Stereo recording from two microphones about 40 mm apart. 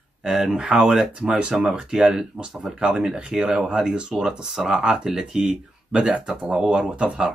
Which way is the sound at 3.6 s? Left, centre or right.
Right.